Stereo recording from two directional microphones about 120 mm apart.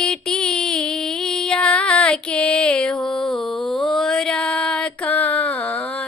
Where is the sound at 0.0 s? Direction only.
5° left (ahead or behind).